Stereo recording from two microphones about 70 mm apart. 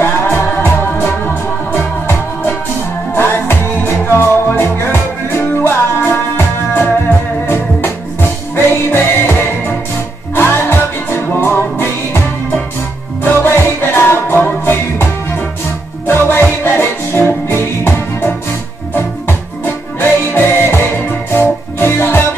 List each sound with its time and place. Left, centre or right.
0.0 s music: left
13.2 s music: left
16.1 s music: left